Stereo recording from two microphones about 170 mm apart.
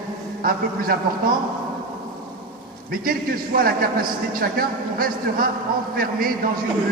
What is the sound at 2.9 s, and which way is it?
A man's voice, 60° right (ahead or behind).